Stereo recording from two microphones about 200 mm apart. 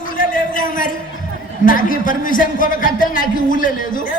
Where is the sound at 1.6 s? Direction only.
45° left (ahead or behind).